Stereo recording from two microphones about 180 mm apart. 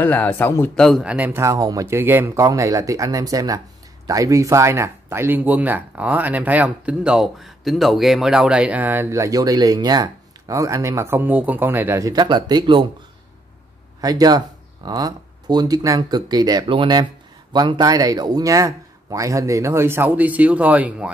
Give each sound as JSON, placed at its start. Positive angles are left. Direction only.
{"t": 0.0, "sound": "speech", "side_deg": 10}
{"t": 0.8, "sound": "speech", "side_deg": -5}
{"t": 14.0, "sound": "speech", "side_deg": -20}